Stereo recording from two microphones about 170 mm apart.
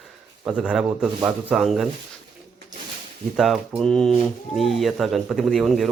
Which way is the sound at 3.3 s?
Centre (ahead or behind).